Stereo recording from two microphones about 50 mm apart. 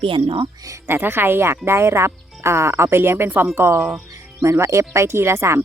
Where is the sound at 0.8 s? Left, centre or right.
Right.